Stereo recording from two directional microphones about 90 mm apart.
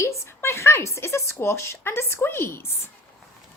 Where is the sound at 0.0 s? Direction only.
30° left (ahead or behind).